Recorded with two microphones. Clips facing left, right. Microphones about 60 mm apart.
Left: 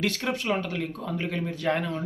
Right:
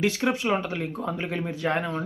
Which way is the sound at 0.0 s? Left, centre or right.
Centre.